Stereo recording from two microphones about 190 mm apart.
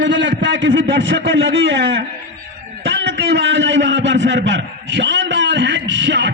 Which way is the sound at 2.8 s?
70° right (ahead or behind).